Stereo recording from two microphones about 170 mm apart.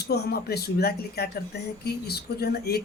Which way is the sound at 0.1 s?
70° left (ahead or behind).